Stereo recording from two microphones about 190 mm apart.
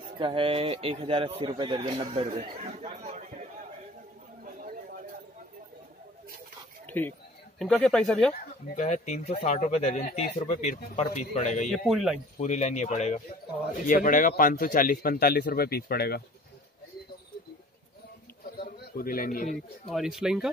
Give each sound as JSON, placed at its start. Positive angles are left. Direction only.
{"t": 0.2, "sound": "a man's voice", "side_deg": -30}
{"t": 4.5, "sound": "chatter", "side_deg": -45}
{"t": 6.9, "sound": "speech", "side_deg": 10}
{"t": 8.6, "sound": "speech", "side_deg": 40}
{"t": 11.6, "sound": "speech", "side_deg": 0}
{"t": 12.4, "sound": "a man's voice", "side_deg": 35}
{"t": 18.4, "sound": "a sound", "side_deg": 50}
{"t": 19.9, "sound": "speech", "side_deg": 0}